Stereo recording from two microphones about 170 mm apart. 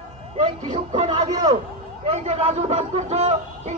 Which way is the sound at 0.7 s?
35° right (ahead or behind).